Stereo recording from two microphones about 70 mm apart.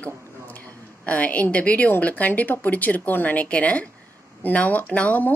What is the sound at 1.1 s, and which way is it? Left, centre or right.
Speech, left.